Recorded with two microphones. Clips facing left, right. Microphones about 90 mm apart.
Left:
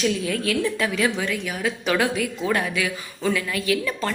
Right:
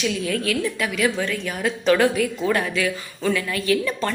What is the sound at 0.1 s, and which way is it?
A woman's voice, 20° left (ahead or behind).